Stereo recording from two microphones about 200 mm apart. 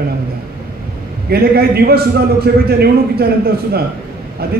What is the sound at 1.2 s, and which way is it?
Speech, 50° right (ahead or behind).